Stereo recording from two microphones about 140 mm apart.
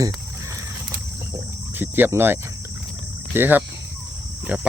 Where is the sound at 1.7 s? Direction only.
15° right (ahead or behind).